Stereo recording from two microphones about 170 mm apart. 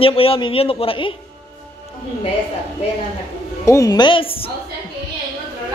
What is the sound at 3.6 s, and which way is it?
Speech, 20° left (ahead or behind).